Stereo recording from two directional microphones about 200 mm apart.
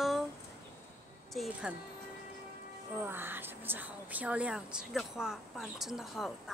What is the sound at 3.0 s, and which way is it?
Speech, 10° right (ahead or behind).